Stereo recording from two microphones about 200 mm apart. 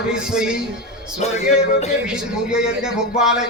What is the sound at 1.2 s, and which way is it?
Music, 35° left (ahead or behind).